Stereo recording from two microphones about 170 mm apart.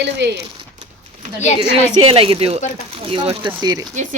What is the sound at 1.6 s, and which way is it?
A woman's voice, 30° right (ahead or behind).